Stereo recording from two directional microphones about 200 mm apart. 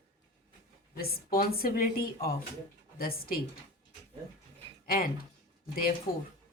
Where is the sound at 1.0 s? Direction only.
50° left (ahead or behind).